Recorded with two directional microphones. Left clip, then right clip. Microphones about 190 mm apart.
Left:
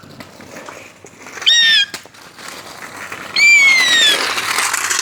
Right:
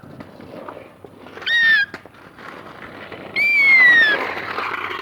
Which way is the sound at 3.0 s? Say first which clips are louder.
Left 5 dB; 15° left (ahead or behind).